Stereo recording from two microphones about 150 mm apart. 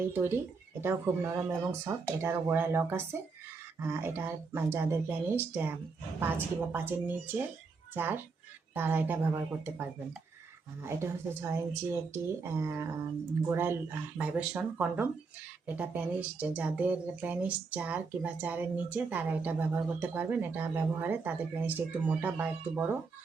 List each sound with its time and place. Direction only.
0.0 s speech: 15° right (ahead or behind)